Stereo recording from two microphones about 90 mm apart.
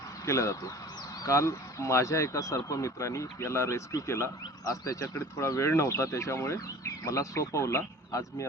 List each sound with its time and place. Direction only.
0.3 s speech: 35° left (ahead or behind)